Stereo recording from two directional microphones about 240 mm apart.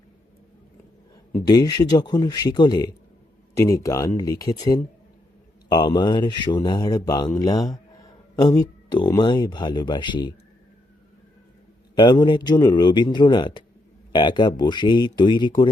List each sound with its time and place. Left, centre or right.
1.3 s speech: centre
11.9 s speech: centre